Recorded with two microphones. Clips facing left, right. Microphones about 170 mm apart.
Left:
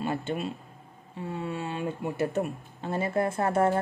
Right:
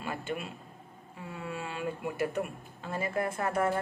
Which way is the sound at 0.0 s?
30° left (ahead or behind).